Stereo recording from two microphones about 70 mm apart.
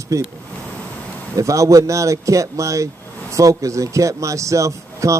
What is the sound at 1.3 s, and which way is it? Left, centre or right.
Speech, right.